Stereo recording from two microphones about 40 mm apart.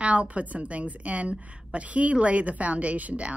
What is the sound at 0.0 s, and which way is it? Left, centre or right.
Speech, right.